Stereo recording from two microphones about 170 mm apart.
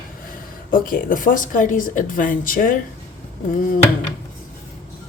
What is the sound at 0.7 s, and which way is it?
Speech, 55° left (ahead or behind).